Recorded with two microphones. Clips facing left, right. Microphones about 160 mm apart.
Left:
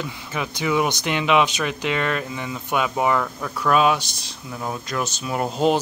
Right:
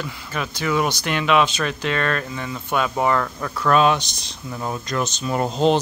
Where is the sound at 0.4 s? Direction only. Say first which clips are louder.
Even; 15° left (ahead or behind).